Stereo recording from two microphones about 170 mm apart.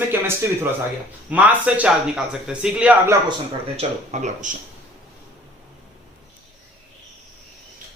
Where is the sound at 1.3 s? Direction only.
10° right (ahead or behind).